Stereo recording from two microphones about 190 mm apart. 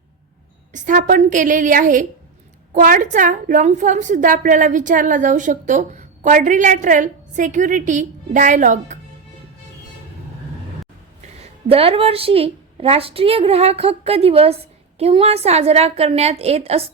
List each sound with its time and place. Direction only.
0.7 s a woman's voice: 45° right (ahead or behind)
11.7 s a woman's voice: 30° right (ahead or behind)